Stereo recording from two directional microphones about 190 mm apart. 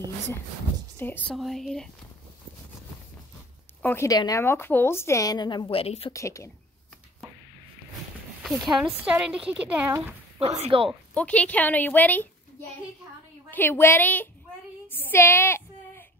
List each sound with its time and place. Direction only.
0.9 s speech: 10° left (ahead or behind)
3.8 s a woman's voice: 15° left (ahead or behind); by 6.1 s 30° left (ahead or behind)
6.1 s a woman's voice: 15° left (ahead or behind)
8.5 s speech: centre (ahead or behind)
10.4 s speech: 30° right (ahead or behind)
11.1 s a woman's voice: 5° left (ahead or behind)
13.5 s a woman's voice: 10° left (ahead or behind)
14.9 s a sound: 10° left (ahead or behind)